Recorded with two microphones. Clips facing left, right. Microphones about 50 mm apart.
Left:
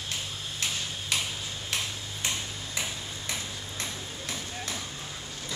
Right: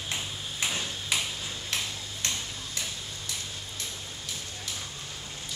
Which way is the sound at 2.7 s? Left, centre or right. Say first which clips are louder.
Left 5 dB; left.